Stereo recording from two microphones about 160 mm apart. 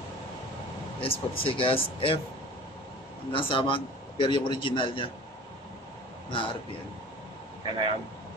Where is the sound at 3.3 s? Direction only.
35° left (ahead or behind).